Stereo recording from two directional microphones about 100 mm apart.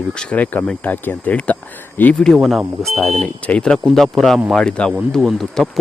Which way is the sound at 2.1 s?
5° left (ahead or behind).